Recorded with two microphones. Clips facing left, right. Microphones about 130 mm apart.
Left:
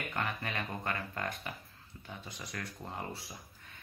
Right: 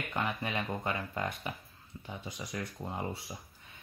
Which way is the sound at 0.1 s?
15° right (ahead or behind).